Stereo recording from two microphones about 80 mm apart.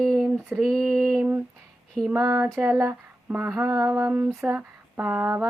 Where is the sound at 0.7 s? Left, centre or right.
Centre.